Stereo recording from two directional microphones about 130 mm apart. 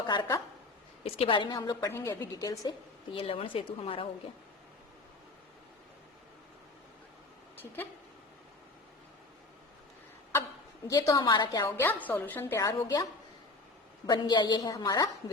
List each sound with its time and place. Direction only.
1.0 s a woman's voice: 50° left (ahead or behind)
1.5 s a woman's voice: 30° left (ahead or behind)
3.1 s a woman's voice: 45° left (ahead or behind)
7.5 s speech: 15° left (ahead or behind)
10.8 s a woman's voice: 25° left (ahead or behind)
11.6 s a woman's voice: 15° left (ahead or behind)
14.1 s a woman's voice: 35° left (ahead or behind)